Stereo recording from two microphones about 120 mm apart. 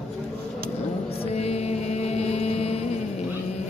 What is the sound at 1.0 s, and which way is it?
Music, 60° left (ahead or behind).